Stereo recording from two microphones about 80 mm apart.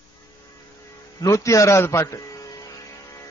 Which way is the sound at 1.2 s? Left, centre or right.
Left.